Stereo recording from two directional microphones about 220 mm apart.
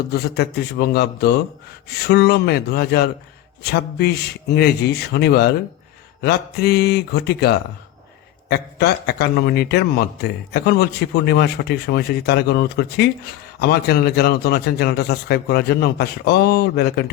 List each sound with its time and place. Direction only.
0.1 s a man's voice: 45° left (ahead or behind)